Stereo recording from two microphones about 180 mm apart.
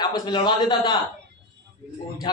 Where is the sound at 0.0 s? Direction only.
25° left (ahead or behind).